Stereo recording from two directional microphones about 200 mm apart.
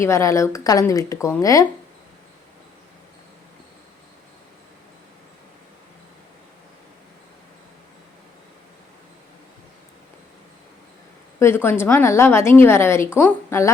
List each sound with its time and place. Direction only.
0.0 s a woman's voice: 15° left (ahead or behind)
11.3 s a woman's voice: 10° left (ahead or behind)